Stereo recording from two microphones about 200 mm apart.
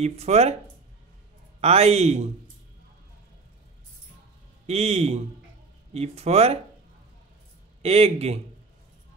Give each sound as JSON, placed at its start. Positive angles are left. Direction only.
{"t": 0.0, "sound": "a man's voice", "side_deg": -30}
{"t": 1.6, "sound": "a man's voice", "side_deg": -30}
{"t": 4.6, "sound": "a man's voice", "side_deg": -30}
{"t": 7.8, "sound": "a man's voice", "side_deg": -30}